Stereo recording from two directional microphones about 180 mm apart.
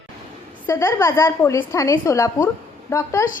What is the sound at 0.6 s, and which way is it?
A woman's voice, 15° left (ahead or behind).